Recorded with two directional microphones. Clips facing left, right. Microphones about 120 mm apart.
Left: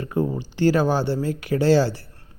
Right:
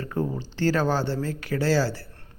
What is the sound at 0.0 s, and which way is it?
Speech, 15° left (ahead or behind).